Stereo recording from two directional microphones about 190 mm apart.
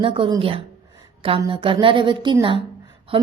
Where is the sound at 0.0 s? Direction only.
25° right (ahead or behind).